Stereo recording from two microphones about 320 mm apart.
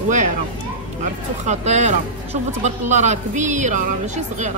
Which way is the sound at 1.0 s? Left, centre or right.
Right.